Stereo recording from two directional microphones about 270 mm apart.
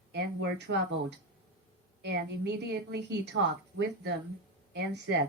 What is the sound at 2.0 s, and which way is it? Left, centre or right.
A woman's voice, right.